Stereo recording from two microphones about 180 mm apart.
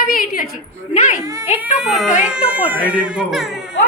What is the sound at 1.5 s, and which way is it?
A child's voice, 5° right (ahead or behind).